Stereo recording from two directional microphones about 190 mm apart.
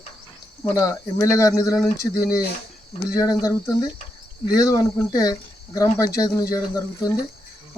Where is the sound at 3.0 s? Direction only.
15° left (ahead or behind).